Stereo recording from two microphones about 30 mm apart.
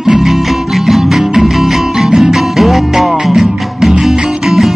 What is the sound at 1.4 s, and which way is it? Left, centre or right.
Music, centre.